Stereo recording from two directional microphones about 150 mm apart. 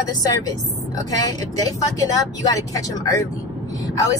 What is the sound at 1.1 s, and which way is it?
Speech, 25° left (ahead or behind).